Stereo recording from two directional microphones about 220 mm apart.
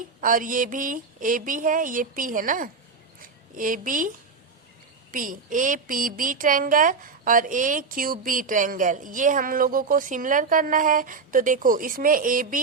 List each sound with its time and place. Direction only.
0.2 s a woman's voice: 40° right (ahead or behind)
5.1 s a woman's voice: 40° right (ahead or behind)